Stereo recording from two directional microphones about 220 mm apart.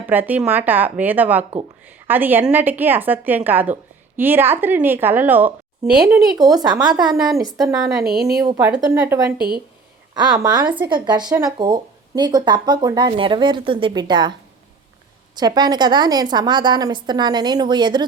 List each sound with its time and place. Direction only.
0.0 s a woman's voice: 10° right (ahead or behind)
6.3 s a woman's voice: 15° right (ahead or behind)
7.0 s a woman's voice: centre (ahead or behind)
8.4 s a woman's voice: 15° right (ahead or behind)
10.3 s a woman's voice: 15° right (ahead or behind)
15.4 s speech: 20° right (ahead or behind)